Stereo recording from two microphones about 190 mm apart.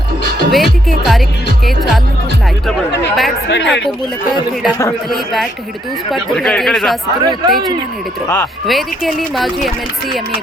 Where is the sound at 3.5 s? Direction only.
70° left (ahead or behind).